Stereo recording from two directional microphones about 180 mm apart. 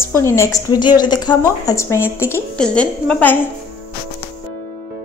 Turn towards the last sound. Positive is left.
turn(degrees=10)  # may be behind; listen again after turning